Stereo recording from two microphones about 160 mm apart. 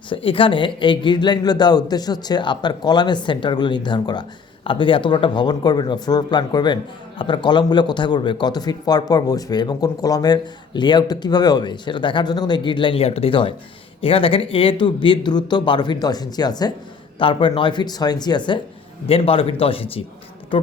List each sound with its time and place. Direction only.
0.1 s speech: 35° left (ahead or behind)